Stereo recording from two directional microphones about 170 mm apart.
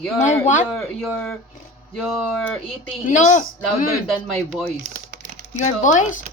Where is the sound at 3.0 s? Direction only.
45° left (ahead or behind).